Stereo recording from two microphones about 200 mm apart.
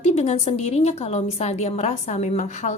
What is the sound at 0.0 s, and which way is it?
A woman's voice, 35° left (ahead or behind).